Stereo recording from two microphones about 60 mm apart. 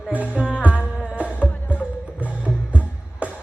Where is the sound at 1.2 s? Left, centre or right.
Left.